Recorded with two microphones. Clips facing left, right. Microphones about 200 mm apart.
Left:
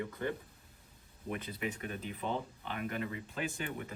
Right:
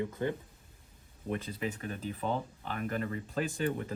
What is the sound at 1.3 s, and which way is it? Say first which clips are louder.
Speech: right 3 dB; 35° right (ahead or behind).